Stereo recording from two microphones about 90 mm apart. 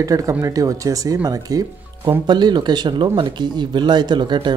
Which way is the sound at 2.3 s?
55° right (ahead or behind).